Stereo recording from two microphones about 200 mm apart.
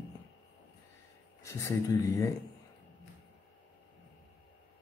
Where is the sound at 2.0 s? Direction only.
15° left (ahead or behind).